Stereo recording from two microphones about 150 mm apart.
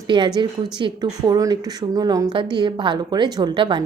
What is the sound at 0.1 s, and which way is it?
A woman's voice, 30° right (ahead or behind).